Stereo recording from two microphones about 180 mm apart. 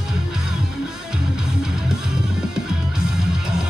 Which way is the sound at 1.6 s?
5° right (ahead or behind).